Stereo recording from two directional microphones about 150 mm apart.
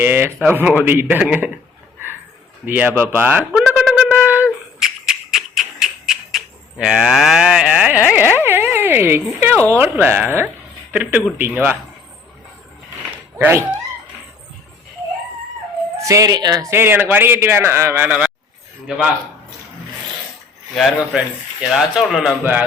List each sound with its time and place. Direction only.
0.0 s speech: 15° right (ahead or behind)
2.6 s speech: 10° right (ahead or behind)
3.5 s a sound: centre (ahead or behind)
3.9 s wind instrument: 5° right (ahead or behind)
4.8 s a sound: centre (ahead or behind)
8.1 s speech: 10° right (ahead or behind)
13.4 s speech: 15° right (ahead or behind)
16.0 s speech: 20° right (ahead or behind)
20.7 s a man's voice: centre (ahead or behind)